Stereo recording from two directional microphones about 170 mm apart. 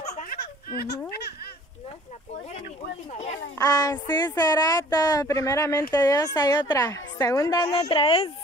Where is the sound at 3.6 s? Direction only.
20° left (ahead or behind).